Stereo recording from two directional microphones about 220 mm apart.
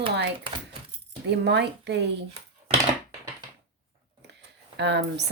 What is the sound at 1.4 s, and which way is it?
Speech, 50° right (ahead or behind).